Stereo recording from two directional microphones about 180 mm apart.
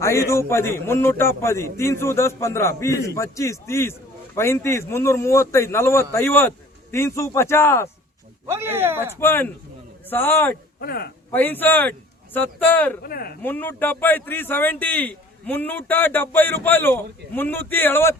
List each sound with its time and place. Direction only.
0.0 s speech: 15° left (ahead or behind)
8.4 s speech: 15° right (ahead or behind)
9.2 s speech: 10° left (ahead or behind)
10.8 s a man's voice: 55° left (ahead or behind)
11.3 s speech: 10° left (ahead or behind)
13.0 s speech: 55° left (ahead or behind)
13.4 s speech: 10° left (ahead or behind)